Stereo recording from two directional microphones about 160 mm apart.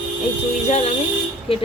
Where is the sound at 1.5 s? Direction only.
35° left (ahead or behind).